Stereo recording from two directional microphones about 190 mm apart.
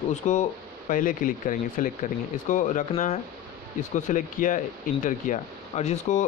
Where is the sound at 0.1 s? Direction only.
40° left (ahead or behind).